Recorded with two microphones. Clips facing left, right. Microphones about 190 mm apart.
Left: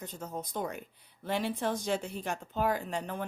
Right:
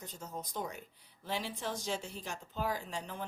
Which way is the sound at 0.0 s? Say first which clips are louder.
Left 5 dB; 60° left (ahead or behind).